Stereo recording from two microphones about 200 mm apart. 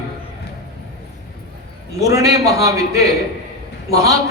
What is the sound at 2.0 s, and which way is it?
A man's voice, 15° right (ahead or behind).